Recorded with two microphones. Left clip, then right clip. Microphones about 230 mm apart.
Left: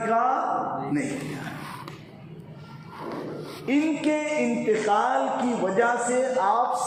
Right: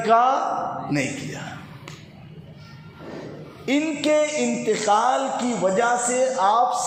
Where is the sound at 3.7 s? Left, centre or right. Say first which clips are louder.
Right 3 dB; right.